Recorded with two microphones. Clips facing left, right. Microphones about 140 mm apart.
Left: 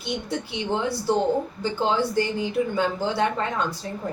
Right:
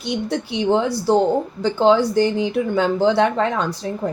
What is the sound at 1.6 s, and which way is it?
Speech, 80° right.